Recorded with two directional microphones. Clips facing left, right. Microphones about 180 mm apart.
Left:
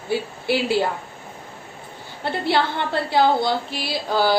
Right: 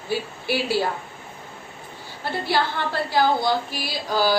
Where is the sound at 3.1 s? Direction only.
25° left (ahead or behind).